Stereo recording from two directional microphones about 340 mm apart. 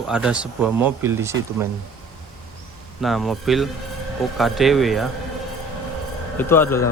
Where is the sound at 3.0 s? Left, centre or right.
Centre.